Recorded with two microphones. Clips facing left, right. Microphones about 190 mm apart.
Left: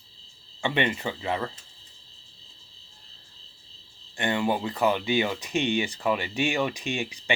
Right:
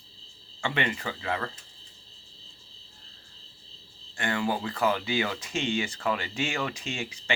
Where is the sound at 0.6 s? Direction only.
20° left (ahead or behind).